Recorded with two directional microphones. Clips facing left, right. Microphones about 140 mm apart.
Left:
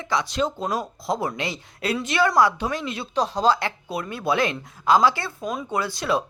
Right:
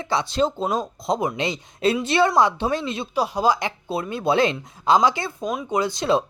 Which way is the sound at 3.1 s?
10° right (ahead or behind).